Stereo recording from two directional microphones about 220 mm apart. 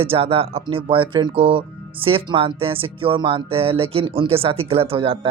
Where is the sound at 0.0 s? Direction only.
25° right (ahead or behind).